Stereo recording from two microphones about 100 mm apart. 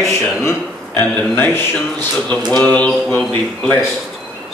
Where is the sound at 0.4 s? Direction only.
20° left (ahead or behind).